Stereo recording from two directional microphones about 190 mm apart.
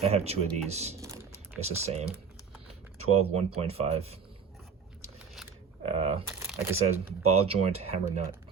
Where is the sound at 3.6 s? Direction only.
35° right (ahead or behind).